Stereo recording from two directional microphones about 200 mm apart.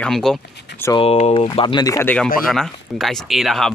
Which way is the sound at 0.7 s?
15° left (ahead or behind).